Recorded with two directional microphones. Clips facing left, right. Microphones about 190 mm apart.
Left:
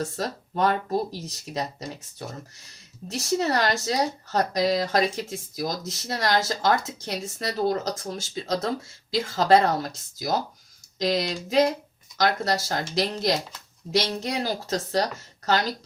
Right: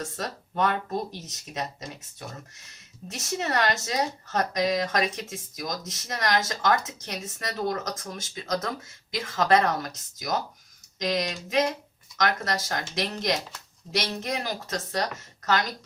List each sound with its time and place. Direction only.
0.0 s speech: 30° left (ahead or behind)